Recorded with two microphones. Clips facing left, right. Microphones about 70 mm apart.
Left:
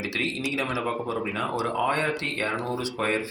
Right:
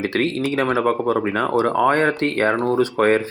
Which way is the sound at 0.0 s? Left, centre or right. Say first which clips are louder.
Right 9 dB; right.